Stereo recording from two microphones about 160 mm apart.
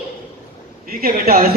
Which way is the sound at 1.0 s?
65° right (ahead or behind).